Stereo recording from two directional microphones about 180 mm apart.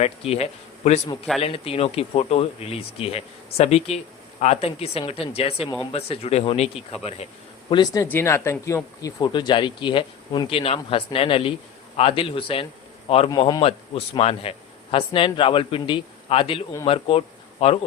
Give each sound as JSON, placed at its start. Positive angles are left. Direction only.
{"t": 0.0, "sound": "speech", "side_deg": 35}
{"t": 7.7, "sound": "speech", "side_deg": 25}
{"t": 8.0, "sound": "speech", "side_deg": 10}